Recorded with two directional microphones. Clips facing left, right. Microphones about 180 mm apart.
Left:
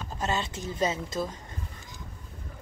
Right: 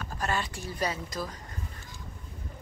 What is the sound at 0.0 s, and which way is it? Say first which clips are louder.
A woman's voice: left 1 dB; 20° left (ahead or behind).